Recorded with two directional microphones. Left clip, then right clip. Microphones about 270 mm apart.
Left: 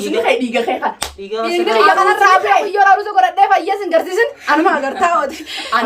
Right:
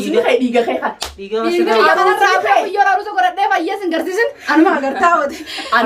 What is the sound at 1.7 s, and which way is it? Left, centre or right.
A woman's voice, centre.